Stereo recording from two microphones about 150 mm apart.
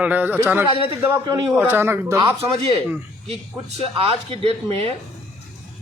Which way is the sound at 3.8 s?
40° right (ahead or behind).